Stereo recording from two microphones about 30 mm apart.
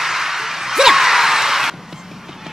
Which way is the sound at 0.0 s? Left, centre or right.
Centre.